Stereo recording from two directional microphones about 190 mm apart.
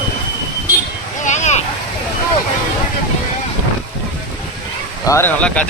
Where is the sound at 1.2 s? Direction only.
40° left (ahead or behind).